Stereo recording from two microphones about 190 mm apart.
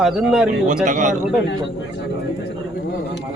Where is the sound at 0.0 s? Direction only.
5° right (ahead or behind).